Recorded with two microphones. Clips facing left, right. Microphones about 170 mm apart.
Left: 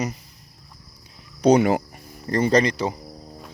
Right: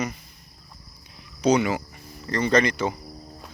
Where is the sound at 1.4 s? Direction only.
50° left (ahead or behind).